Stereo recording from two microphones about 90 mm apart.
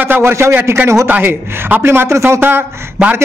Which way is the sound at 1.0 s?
20° right (ahead or behind).